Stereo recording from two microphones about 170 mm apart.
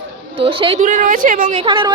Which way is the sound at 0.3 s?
35° right (ahead or behind).